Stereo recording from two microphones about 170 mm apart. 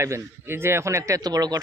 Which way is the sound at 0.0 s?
15° right (ahead or behind).